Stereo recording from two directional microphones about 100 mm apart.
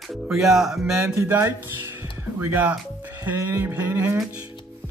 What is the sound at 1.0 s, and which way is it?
Speech, 25° right (ahead or behind).